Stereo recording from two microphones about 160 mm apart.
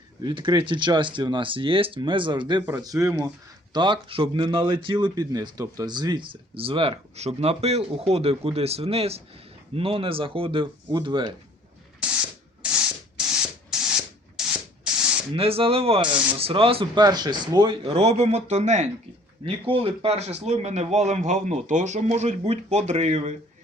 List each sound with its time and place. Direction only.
0.2 s speech: 30° right (ahead or behind)
3.7 s speech: 30° right (ahead or behind)
12.6 s spray: 5° right (ahead or behind)
15.3 s speech: 35° right (ahead or behind)
19.5 s a man's voice: 35° right (ahead or behind)